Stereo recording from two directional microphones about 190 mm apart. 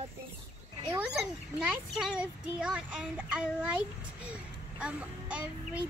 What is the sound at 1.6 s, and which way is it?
Speech, 5° right (ahead or behind).